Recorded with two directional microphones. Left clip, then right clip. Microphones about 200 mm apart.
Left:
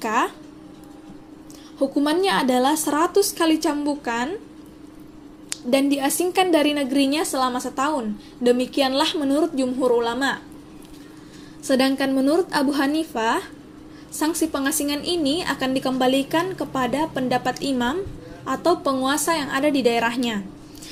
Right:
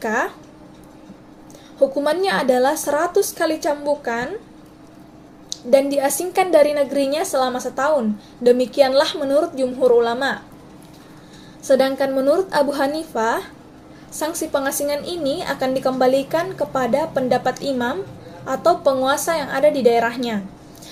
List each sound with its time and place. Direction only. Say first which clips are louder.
0.0 s a woman's voice: even; 20° left (ahead or behind)
2.0 s a woman's voice: right 2 dB; 15° left (ahead or behind)
5.7 s a woman's voice: right 5 dB; 15° left (ahead or behind)
11.6 s a woman's voice: right 4 dB; 25° left (ahead or behind)